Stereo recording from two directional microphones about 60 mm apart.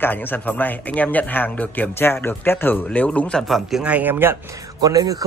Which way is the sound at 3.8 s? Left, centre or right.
Right.